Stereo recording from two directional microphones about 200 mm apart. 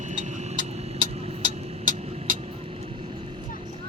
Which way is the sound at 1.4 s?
45° right (ahead or behind).